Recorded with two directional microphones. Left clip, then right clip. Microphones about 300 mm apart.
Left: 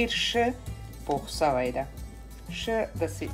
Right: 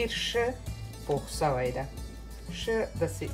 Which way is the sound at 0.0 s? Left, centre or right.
Left.